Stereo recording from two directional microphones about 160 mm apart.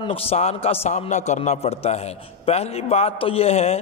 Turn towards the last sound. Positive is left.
turn(degrees=40)  # may be behind; listen again after turning